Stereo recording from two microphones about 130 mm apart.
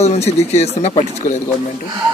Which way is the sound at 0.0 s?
55° left (ahead or behind).